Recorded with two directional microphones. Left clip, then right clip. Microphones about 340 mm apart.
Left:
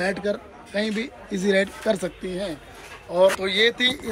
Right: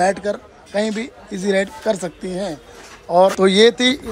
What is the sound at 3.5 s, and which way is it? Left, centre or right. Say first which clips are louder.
Speech: right 8 dB; right.